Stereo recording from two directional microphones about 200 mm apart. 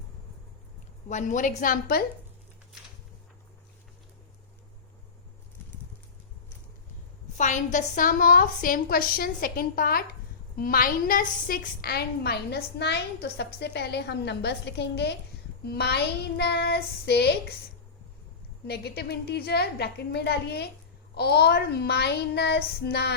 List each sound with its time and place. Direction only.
1.0 s a woman's voice: 40° left (ahead or behind)
7.3 s a woman's voice: 40° left (ahead or behind); by 17.6 s 55° left (ahead or behind)
18.7 s a woman's voice: 55° left (ahead or behind)